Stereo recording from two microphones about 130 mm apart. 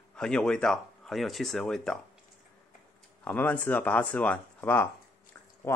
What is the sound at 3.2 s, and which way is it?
Speech, 10° left (ahead or behind).